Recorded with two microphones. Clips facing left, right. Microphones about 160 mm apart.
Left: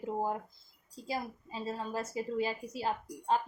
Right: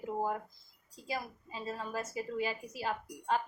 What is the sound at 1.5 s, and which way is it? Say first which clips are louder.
A woman's voice: left 2 dB; 30° left (ahead or behind).